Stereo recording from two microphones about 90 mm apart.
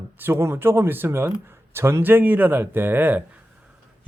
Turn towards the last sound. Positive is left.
turn(degrees=-20)  # may be behind; listen again after turning